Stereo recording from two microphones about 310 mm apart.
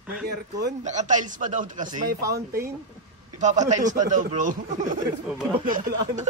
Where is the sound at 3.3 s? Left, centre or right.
Right.